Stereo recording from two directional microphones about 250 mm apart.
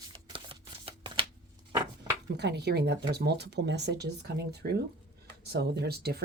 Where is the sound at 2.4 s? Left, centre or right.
Right.